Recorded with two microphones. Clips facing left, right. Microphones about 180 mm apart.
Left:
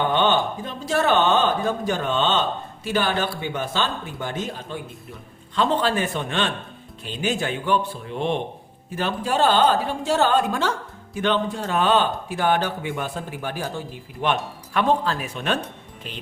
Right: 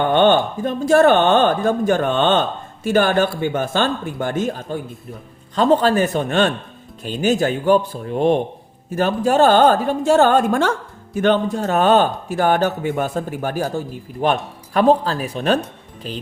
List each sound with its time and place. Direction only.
0.0 s speech: 55° right (ahead or behind); by 16.2 s 35° right (ahead or behind)